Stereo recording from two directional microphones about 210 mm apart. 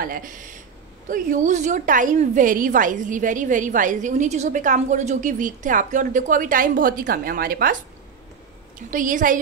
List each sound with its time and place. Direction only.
0.0 s a woman's voice: 40° right (ahead or behind)
8.7 s a woman's voice: 40° right (ahead or behind)